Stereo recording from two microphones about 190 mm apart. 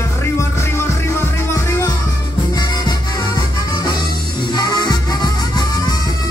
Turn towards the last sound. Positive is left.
turn(degrees=20)  # may be behind; listen again after turning